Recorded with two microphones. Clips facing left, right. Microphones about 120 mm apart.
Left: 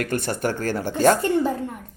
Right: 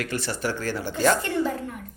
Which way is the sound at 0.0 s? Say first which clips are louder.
Left 4 dB; 50° left (ahead or behind).